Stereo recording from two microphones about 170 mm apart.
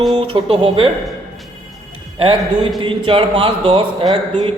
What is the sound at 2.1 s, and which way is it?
A man's voice, 30° right (ahead or behind).